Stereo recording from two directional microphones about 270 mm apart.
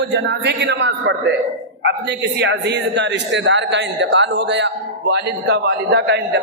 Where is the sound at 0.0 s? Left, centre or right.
Right.